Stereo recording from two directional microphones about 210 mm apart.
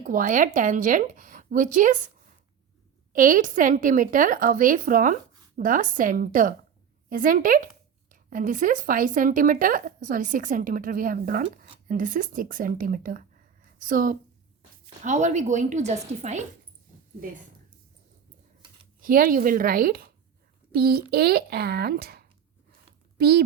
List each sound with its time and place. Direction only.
0.0 s a woman's voice: 40° right (ahead or behind)
3.1 s a woman's voice: 40° right (ahead or behind)
17.2 s a sound: 40° right (ahead or behind)
18.9 s speech: 40° right (ahead or behind)